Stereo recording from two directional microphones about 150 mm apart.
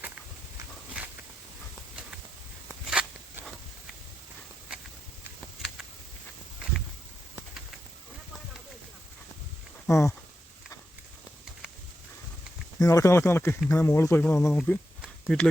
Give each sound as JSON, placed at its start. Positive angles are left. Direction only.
{"t": 2.6, "sound": "a sound", "side_deg": -5}
{"t": 9.8, "sound": "speech", "side_deg": 20}
{"t": 12.8, "sound": "speech", "side_deg": 20}